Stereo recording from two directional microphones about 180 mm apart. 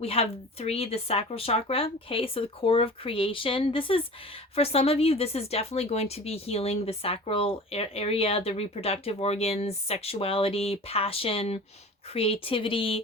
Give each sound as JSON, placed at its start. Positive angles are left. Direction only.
{"t": 0.0, "sound": "speech", "side_deg": 30}